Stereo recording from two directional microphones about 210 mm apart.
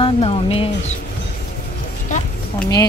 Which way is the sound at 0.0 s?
30° left (ahead or behind).